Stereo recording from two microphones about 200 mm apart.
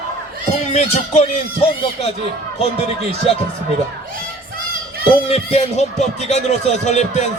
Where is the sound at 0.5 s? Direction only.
35° left (ahead or behind).